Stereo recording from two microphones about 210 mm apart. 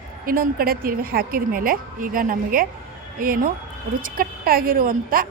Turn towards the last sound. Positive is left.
turn(degrees=-45)  # may be behind; listen again after turning